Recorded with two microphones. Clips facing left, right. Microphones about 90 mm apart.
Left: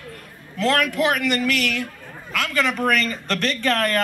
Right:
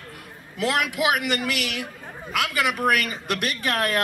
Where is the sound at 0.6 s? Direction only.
15° right (ahead or behind).